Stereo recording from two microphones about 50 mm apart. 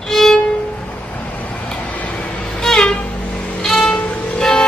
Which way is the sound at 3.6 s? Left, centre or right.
Centre.